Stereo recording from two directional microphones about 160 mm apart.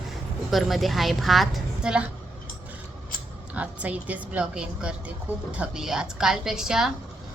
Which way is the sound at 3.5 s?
10° right (ahead or behind).